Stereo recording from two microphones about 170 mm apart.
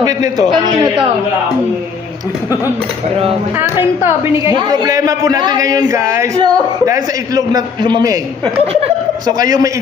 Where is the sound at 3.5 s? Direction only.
15° right (ahead or behind).